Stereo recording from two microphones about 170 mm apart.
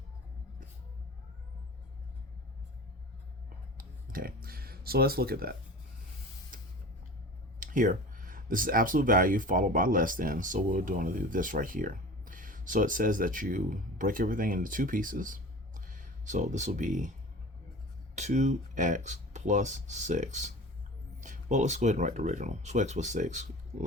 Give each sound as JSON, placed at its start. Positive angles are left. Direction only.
{"t": 3.8, "sound": "speech", "side_deg": -55}
{"t": 7.6, "sound": "speech", "side_deg": -50}
{"t": 18.1, "sound": "speech", "side_deg": -45}